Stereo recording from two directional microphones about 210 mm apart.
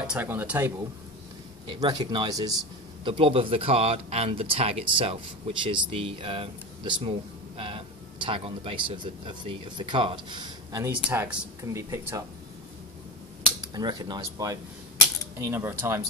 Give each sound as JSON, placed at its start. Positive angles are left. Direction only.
{"t": 0.0, "sound": "speech", "side_deg": -5}
{"t": 1.7, "sound": "speech", "side_deg": -20}
{"t": 11.0, "sound": "speech", "side_deg": -5}
{"t": 13.6, "sound": "speech", "side_deg": -20}